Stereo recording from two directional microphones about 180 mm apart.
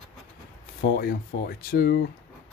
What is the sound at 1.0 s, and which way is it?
Speech, 55° left (ahead or behind).